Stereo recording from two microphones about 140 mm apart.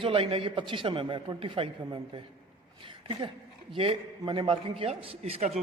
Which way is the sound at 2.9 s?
35° right (ahead or behind).